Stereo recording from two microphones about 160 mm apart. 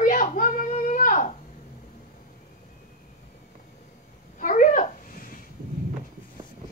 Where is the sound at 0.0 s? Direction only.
55° left (ahead or behind).